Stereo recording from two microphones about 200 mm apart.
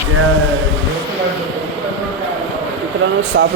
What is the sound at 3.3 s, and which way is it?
Speech, 60° right (ahead or behind).